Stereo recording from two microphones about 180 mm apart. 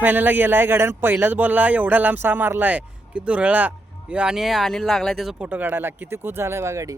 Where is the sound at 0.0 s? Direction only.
10° right (ahead or behind).